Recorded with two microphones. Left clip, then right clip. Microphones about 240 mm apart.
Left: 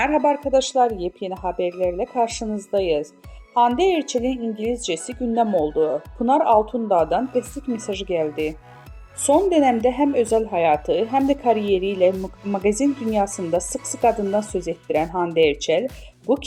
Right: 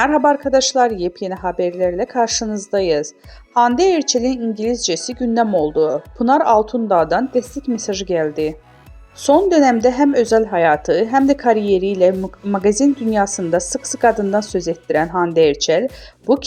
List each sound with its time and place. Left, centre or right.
0.0 s a woman's voice: right